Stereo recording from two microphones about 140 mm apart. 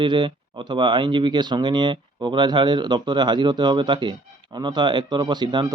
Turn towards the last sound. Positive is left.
turn(degrees=-30)  # may be behind; listen again after turning